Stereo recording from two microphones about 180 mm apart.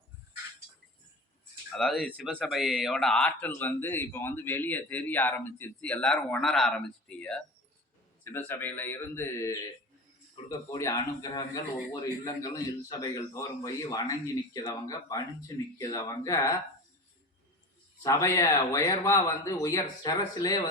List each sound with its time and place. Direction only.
1.7 s speech: centre (ahead or behind)
10.7 s speech: 15° left (ahead or behind)
18.0 s speech: 15° left (ahead or behind)